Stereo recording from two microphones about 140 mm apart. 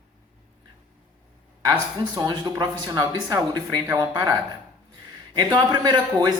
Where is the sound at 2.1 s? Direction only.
25° right (ahead or behind).